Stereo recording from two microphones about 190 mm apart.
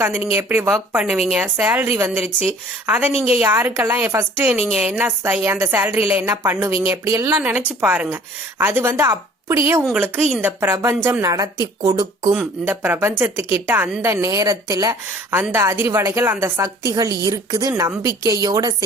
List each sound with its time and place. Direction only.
0.0 s a woman's voice: 10° right (ahead or behind)
12.3 s a woman's voice: 10° right (ahead or behind)